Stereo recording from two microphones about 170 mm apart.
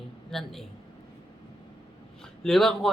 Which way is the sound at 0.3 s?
Centre (ahead or behind).